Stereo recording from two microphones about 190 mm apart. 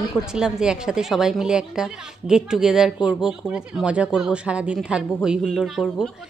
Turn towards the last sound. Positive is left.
turn(degrees=0)  # may be behind; listen again after turning